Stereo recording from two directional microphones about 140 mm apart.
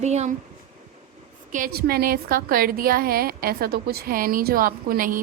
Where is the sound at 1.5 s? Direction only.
75° right (ahead or behind).